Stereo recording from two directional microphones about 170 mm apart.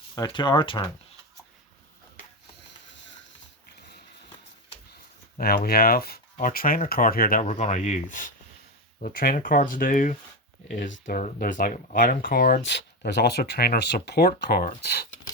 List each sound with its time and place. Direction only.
0.2 s speech: 25° left (ahead or behind)
5.4 s speech: 60° left (ahead or behind)
9.0 s speech: 60° left (ahead or behind)